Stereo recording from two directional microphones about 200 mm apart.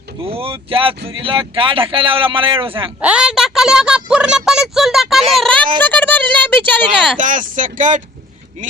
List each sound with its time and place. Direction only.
0.3 s speech: 30° right (ahead or behind)
3.0 s a woman's voice: 5° right (ahead or behind)
5.3 s a sound: centre (ahead or behind)
5.8 s speech: 10° left (ahead or behind)
7.2 s speech: 40° right (ahead or behind)